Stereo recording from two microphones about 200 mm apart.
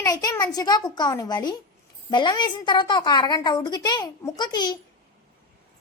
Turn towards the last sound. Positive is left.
turn(degrees=20)  # may be behind; listen again after turning